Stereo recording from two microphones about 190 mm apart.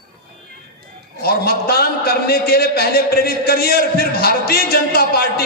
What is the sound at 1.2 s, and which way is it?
A man's voice, 55° left (ahead or behind).